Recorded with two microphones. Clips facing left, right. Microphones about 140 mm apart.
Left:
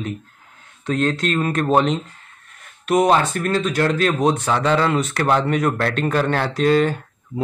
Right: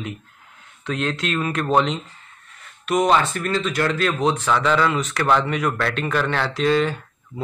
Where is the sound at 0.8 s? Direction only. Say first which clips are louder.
Left 4 dB; 40° left (ahead or behind).